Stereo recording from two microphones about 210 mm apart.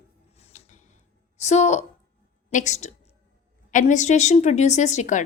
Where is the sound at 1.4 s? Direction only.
35° left (ahead or behind).